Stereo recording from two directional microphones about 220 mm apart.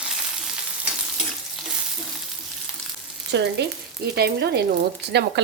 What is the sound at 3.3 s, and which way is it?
Speech, 55° right (ahead or behind).